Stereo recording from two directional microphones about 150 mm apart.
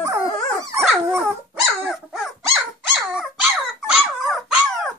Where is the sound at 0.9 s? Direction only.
Centre (ahead or behind).